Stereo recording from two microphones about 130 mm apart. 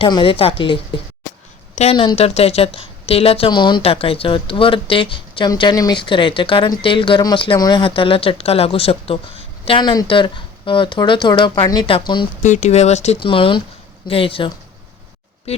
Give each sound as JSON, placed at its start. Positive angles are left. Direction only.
{"t": 0.0, "sound": "a woman's voice", "side_deg": 40}
{"t": 12.4, "sound": "speech", "side_deg": 65}
{"t": 13.1, "sound": "speech", "side_deg": 40}